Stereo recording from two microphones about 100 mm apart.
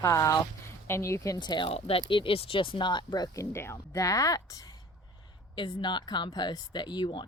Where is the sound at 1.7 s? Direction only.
70° left (ahead or behind); by 4.8 s 35° left (ahead or behind).